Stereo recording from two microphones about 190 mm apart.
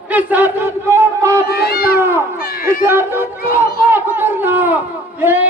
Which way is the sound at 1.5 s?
55° left (ahead or behind).